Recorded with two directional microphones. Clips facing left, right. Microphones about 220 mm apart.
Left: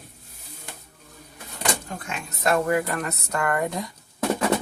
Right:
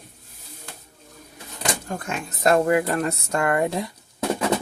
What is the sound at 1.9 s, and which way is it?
Speech, 45° right (ahead or behind).